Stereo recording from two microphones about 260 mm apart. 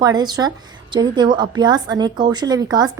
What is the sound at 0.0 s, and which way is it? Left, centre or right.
A woman's voice, centre.